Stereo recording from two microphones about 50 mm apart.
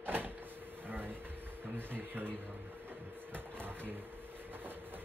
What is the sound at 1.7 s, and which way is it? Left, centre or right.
Speech, right.